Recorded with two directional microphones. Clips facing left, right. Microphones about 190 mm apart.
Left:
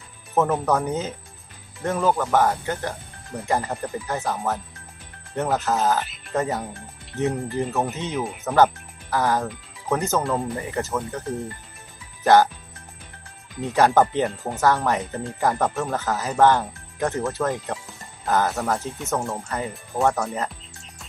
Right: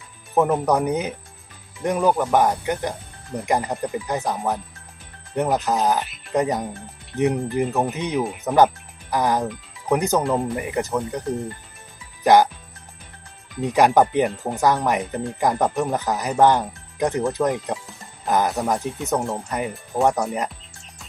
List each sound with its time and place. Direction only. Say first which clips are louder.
0.3 s speech: right 2 dB; 15° right (ahead or behind)
12.2 s speech: right 1 dB; 15° right (ahead or behind)
13.7 s speech: right 2 dB; 15° right (ahead or behind)